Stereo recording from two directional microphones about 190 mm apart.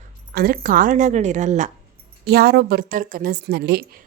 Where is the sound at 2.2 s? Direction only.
55° right (ahead or behind).